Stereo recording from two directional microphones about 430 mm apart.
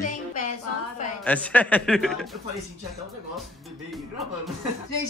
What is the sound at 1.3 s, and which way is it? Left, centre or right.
Speech, centre.